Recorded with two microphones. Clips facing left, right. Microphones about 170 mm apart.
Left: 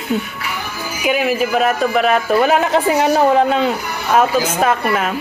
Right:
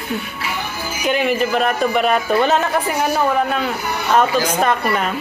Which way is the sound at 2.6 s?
25° left (ahead or behind).